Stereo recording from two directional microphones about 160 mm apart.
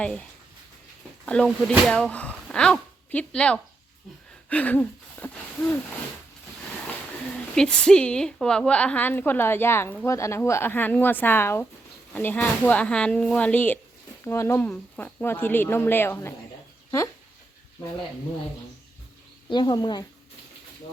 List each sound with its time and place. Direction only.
0.0 s a woman's voice: 5° left (ahead or behind)
7.5 s a woman's voice: 5° left (ahead or behind)
19.5 s speech: 30° left (ahead or behind)